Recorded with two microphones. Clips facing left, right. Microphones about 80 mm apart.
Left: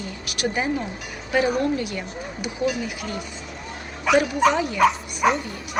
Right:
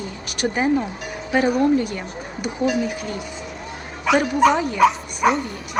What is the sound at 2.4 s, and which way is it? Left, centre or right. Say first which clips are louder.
Speech: right 4 dB; right.